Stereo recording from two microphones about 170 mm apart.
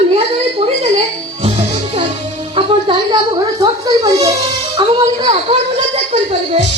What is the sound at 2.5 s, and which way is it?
A woman's voice, 30° right (ahead or behind).